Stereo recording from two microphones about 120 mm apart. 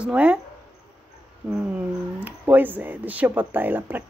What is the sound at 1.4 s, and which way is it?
Speech, 10° right (ahead or behind).